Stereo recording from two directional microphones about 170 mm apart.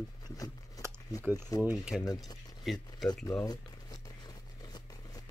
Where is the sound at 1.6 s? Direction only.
5° right (ahead or behind).